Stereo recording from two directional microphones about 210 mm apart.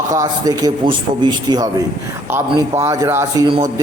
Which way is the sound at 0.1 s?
15° right (ahead or behind).